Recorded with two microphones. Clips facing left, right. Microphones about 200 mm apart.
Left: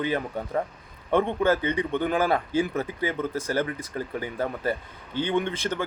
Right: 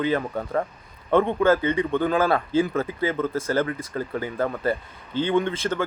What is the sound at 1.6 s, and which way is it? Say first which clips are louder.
Speech: right 3 dB; 15° left (ahead or behind).